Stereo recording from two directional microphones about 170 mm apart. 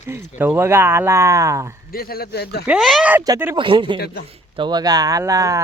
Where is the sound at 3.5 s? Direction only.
30° right (ahead or behind).